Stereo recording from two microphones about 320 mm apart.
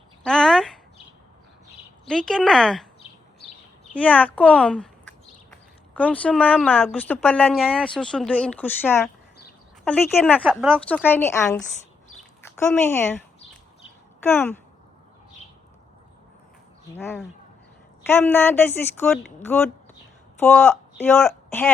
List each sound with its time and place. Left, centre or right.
0.3 s a sound: centre
2.0 s speech: centre
3.0 s bird: centre
3.9 s speech: centre
14.3 s a woman's voice: centre
16.9 s a woman's voice: centre